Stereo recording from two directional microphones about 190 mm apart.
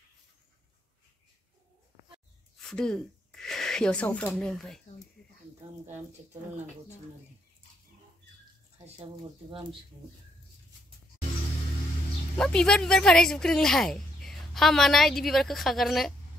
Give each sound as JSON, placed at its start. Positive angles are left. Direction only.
{"t": 2.6, "sound": "speech", "side_deg": 5}
{"t": 8.8, "sound": "speech", "side_deg": -30}
{"t": 12.4, "sound": "speech", "side_deg": 5}